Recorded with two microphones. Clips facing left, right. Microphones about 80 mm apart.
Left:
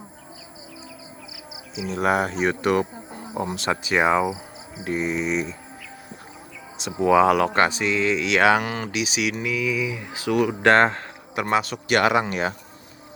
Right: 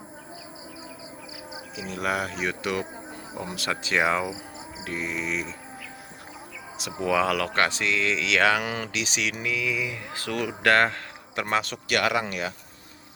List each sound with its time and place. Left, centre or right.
1.9 s speech: left
2.6 s insect: left
3.4 s speech: left
6.7 s speech: left
8.6 s a man's voice: centre
10.7 s speech: left
11.3 s a man's voice: centre
11.9 s speech: left